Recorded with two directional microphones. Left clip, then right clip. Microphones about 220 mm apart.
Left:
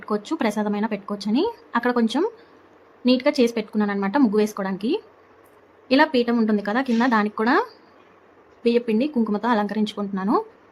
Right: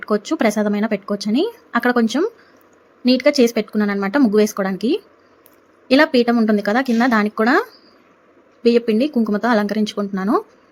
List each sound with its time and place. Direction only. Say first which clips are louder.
0.0 s speech: right 6 dB; 15° right (ahead or behind)